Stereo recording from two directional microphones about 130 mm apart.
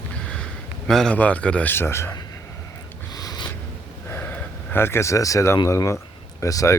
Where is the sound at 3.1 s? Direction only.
30° left (ahead or behind).